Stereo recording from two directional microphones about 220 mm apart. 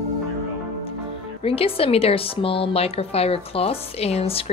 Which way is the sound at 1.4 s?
25° left (ahead or behind).